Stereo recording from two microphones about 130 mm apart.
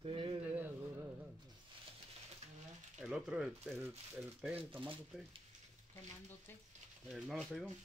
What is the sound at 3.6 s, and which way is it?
Speech, 15° right (ahead or behind).